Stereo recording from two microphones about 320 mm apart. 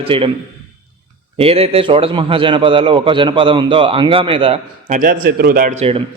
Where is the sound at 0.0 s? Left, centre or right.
Centre.